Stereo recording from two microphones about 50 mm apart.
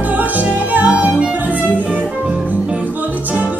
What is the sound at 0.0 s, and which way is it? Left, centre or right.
Music, right.